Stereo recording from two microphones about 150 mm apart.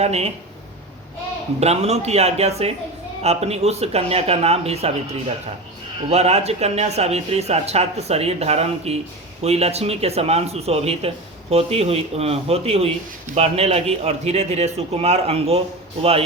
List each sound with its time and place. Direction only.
0.0 s speech: 45° right (ahead or behind)
1.5 s speech: 45° right (ahead or behind)
6.1 s speech: 45° right (ahead or behind)